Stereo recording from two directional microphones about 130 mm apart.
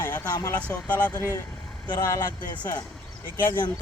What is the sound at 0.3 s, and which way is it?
Speech, 25° left (ahead or behind).